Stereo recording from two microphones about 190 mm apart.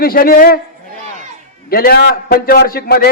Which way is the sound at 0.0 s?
50° left (ahead or behind).